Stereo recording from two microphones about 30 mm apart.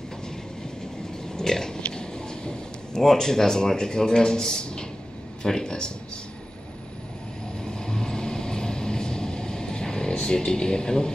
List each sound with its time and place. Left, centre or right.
1.3 s pig: centre
1.9 s vehicle: left
3.0 s speech: centre
7.8 s vehicle: left